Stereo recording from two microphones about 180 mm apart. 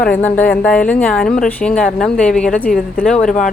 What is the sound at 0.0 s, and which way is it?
Speech, 10° left (ahead or behind).